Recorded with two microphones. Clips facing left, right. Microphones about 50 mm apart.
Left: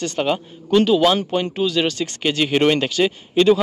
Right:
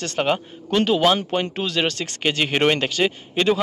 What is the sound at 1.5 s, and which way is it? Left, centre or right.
Speech, right.